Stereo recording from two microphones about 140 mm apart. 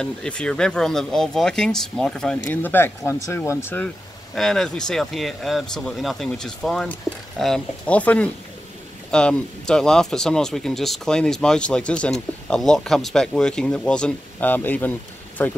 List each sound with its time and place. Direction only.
0.0 s speech: 5° left (ahead or behind)
2.6 s speech: 15° left (ahead or behind)
4.4 s speech: 5° left (ahead or behind)